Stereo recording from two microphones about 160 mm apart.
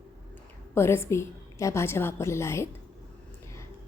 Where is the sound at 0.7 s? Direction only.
15° left (ahead or behind).